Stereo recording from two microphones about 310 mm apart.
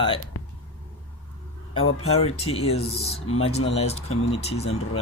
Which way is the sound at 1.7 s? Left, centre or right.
Left.